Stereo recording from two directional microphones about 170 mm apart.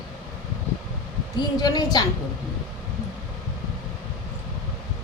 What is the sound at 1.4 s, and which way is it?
Speech, 25° left (ahead or behind).